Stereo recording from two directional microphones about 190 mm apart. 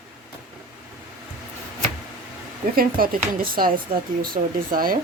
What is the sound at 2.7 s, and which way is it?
Speech, 50° right (ahead or behind).